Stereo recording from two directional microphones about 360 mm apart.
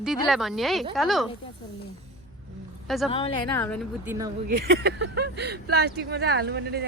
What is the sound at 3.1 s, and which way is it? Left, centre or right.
A woman's voice, centre.